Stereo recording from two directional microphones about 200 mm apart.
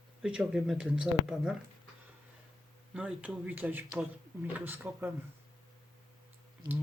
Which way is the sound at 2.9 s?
5° right (ahead or behind).